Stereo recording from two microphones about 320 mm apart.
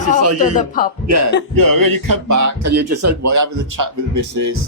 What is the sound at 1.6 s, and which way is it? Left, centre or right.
Speech, right.